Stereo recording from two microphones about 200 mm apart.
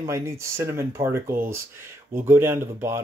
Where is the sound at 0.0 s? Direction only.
15° right (ahead or behind).